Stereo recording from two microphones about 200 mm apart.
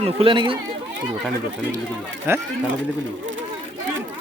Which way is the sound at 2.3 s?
10° right (ahead or behind).